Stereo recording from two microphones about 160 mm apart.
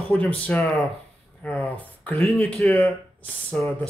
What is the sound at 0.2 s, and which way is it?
Speech, 10° left (ahead or behind).